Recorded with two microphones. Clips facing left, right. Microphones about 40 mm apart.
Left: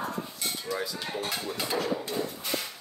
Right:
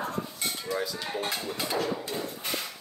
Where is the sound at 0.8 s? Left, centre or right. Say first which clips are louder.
Right 1 dB; centre.